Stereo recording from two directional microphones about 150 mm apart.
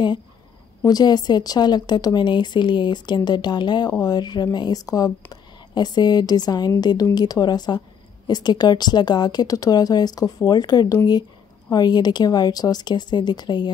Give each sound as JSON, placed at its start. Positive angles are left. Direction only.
{"t": 0.8, "sound": "speech", "side_deg": 25}